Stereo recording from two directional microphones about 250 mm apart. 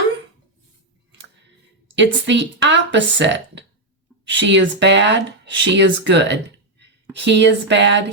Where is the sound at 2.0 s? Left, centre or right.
Right.